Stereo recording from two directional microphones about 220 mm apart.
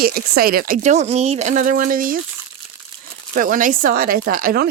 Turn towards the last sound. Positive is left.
turn(degrees=-40)  # may be behind; listen again after turning